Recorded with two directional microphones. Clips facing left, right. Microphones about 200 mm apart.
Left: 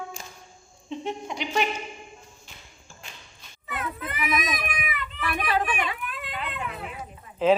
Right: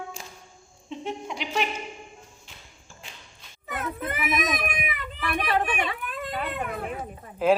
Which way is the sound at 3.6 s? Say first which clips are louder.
Right 2 dB; 50° right (ahead or behind).